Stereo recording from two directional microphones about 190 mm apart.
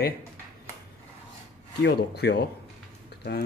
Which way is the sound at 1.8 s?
60° left (ahead or behind).